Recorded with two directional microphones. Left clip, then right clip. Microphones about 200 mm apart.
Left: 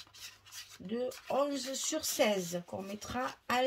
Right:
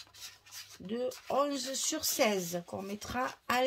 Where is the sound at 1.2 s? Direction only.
35° right (ahead or behind).